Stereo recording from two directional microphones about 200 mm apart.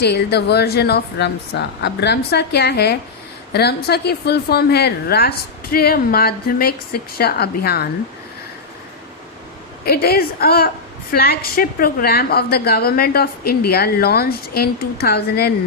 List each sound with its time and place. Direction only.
0.0 s a woman's voice: 55° left (ahead or behind)
9.8 s a woman's voice: 50° left (ahead or behind)